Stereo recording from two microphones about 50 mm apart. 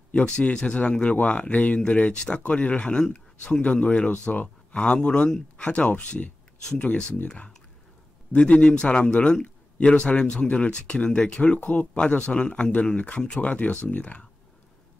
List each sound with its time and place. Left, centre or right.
0.1 s speech: left
11.7 s speech: left
12.0 s speech: centre